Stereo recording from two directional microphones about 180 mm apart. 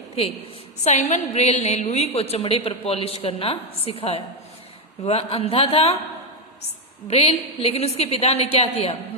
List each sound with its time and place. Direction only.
0.9 s a woman's voice: 40° left (ahead or behind)
7.1 s a woman's voice: 35° left (ahead or behind)